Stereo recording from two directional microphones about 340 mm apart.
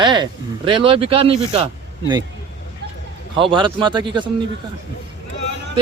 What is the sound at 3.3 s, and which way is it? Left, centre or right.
Speech, centre.